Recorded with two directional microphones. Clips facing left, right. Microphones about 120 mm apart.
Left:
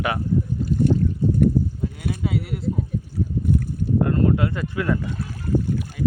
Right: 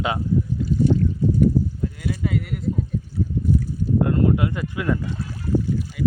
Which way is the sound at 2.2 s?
5° left (ahead or behind).